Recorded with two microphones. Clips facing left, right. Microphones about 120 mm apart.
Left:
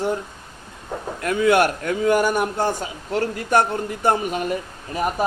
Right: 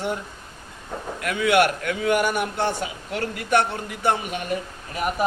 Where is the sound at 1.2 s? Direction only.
35° left (ahead or behind).